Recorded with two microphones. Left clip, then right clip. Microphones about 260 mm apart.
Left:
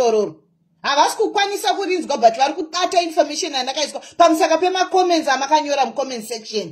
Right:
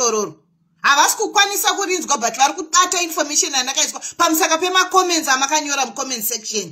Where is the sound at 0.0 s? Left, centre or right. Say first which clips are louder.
Left 3 dB; right.